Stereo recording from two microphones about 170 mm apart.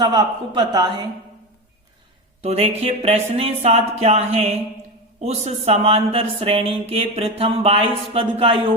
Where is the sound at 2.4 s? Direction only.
35° right (ahead or behind).